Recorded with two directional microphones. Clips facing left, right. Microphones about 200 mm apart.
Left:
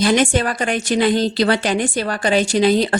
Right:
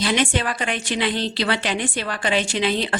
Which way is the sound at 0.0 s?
45° left (ahead or behind).